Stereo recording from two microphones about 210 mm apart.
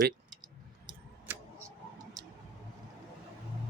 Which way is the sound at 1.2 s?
10° right (ahead or behind).